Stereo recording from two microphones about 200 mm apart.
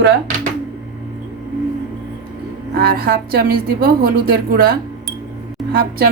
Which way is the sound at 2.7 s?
50° right (ahead or behind).